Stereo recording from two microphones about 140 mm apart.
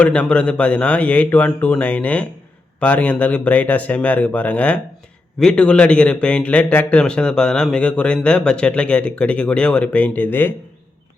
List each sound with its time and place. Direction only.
0.0 s speech: 10° left (ahead or behind)